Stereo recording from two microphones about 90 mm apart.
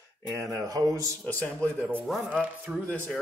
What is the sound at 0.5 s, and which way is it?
Speech, 40° right (ahead or behind).